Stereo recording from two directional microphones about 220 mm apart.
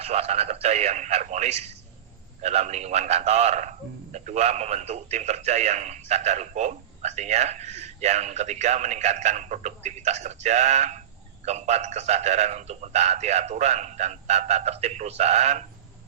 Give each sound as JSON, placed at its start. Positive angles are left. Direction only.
{"t": 0.0, "sound": "a man's voice", "side_deg": -30}